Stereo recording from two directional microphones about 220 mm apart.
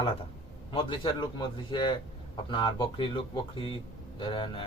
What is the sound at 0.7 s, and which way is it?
Speech, 20° left (ahead or behind).